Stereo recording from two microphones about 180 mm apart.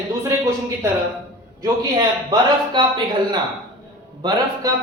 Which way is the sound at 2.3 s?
25° right (ahead or behind).